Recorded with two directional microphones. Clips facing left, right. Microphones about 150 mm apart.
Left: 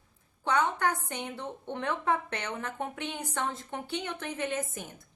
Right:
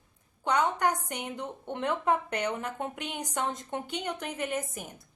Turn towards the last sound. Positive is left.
turn(degrees=-10)  # may be behind; listen again after turning